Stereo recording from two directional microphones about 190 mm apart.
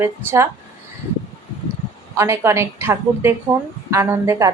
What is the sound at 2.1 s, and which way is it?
A woman's voice, 15° right (ahead or behind).